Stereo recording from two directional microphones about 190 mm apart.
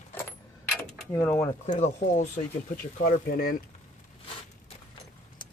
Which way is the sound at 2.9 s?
45° left (ahead or behind).